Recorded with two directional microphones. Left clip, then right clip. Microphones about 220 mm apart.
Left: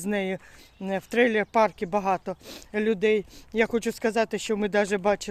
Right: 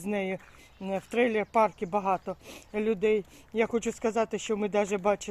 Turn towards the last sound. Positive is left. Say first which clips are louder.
# left 3 dB
turn(degrees=20)  # may be behind; listen again after turning